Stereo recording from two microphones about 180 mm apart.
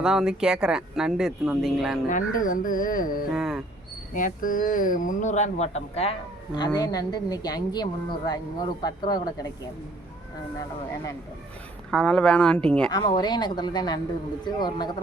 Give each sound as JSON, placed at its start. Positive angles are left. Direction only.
{"t": 0.0, "sound": "speech", "side_deg": -5}
{"t": 2.0, "sound": "speech", "side_deg": 45}
{"t": 3.3, "sound": "speech", "side_deg": -5}
{"t": 4.1, "sound": "speech", "side_deg": 50}
{"t": 6.6, "sound": "a woman's voice", "side_deg": 20}
{"t": 11.9, "sound": "speech", "side_deg": 5}
{"t": 12.9, "sound": "a woman's voice", "side_deg": 20}